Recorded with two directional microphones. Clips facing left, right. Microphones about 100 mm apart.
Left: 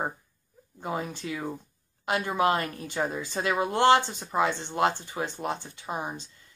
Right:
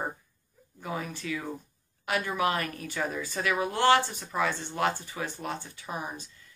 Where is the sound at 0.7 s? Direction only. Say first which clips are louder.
Left 3 dB; 25° left (ahead or behind).